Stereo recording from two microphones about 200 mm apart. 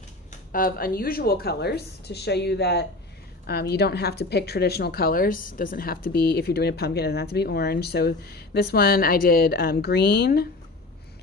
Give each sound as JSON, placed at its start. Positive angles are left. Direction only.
{"t": 0.5, "sound": "a woman's voice", "side_deg": 45}